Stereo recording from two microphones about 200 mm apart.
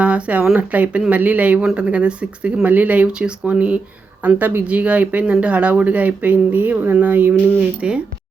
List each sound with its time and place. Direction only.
0.0 s speech: 5° right (ahead or behind)